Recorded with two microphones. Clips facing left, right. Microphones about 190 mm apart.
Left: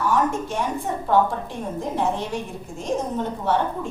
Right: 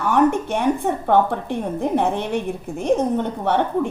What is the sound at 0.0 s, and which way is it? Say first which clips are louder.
A woman's voice: right 5 dB; 60° right (ahead or behind).